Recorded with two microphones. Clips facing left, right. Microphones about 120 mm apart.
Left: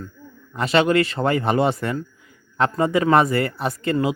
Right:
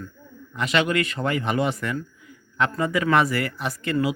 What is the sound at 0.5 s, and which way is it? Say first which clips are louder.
Speech: left 5 dB; 35° left (ahead or behind).